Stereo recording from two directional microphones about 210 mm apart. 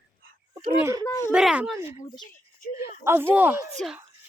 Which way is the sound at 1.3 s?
5° right (ahead or behind).